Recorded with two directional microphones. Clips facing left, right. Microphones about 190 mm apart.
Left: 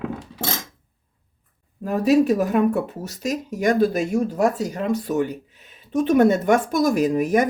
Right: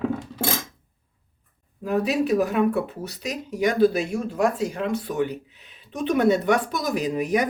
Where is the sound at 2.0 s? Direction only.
45° left (ahead or behind).